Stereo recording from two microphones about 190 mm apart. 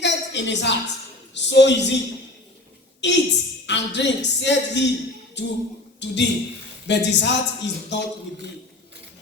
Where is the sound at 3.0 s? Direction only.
65° left (ahead or behind).